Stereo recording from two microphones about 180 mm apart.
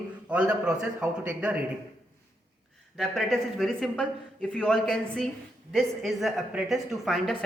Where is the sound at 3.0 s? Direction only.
Centre (ahead or behind).